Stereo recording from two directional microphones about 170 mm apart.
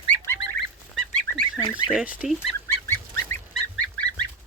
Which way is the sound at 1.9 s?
5° right (ahead or behind).